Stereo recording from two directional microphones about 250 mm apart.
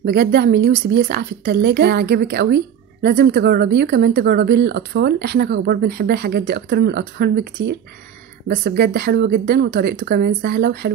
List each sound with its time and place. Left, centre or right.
0.0 s a woman's voice: right